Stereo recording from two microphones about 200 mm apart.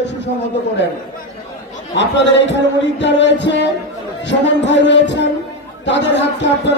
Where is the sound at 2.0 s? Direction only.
60° left (ahead or behind).